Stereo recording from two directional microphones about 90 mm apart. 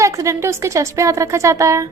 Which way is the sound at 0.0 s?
35° right (ahead or behind).